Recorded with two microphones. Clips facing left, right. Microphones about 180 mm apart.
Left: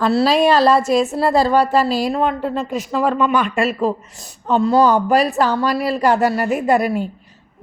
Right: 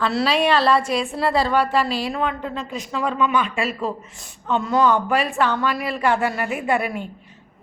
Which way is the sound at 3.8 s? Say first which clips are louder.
Left 7 dB; 40° left (ahead or behind).